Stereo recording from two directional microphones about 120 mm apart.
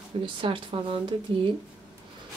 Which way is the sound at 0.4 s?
45° right (ahead or behind).